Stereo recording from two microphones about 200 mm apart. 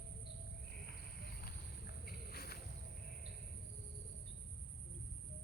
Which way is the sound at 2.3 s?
50° left (ahead or behind).